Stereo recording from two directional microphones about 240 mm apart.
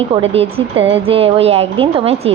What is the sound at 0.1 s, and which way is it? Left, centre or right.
A woman's voice, right.